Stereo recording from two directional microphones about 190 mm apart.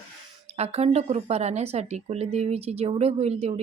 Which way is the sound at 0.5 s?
35° right (ahead or behind).